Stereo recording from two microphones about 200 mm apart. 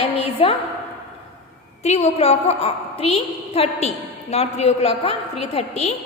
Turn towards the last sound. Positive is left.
turn(degrees=30)  # may be behind; listen again after turning